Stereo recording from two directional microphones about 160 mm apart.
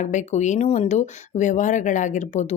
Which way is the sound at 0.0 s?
50° left (ahead or behind).